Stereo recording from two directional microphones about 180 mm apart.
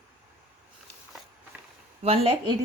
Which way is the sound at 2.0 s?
35° right (ahead or behind).